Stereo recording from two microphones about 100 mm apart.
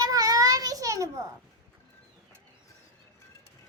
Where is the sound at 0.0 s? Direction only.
35° right (ahead or behind).